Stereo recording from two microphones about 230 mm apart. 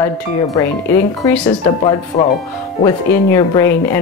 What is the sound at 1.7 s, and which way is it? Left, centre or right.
Speech, left.